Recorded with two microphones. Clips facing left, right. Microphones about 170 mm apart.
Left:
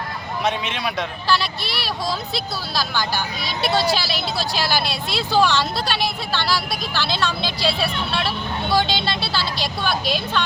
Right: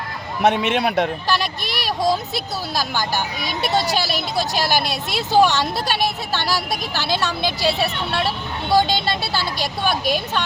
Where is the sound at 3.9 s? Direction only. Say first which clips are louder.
Even; 45° right (ahead or behind).